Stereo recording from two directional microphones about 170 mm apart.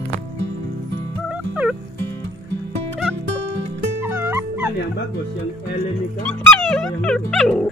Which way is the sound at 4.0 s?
15° right (ahead or behind).